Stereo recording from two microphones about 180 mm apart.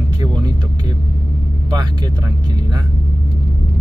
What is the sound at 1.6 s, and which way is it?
Speech, 25° right (ahead or behind).